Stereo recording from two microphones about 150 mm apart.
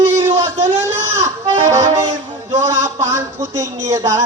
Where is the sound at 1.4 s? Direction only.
20° right (ahead or behind).